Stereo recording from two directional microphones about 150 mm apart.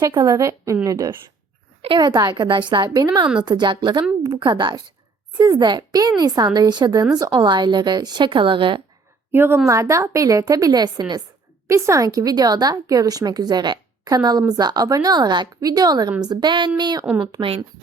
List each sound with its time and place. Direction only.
0.0 s a woman's voice: 25° right (ahead or behind)
9.3 s a woman's voice: 15° right (ahead or behind); by 17.7 s 30° right (ahead or behind)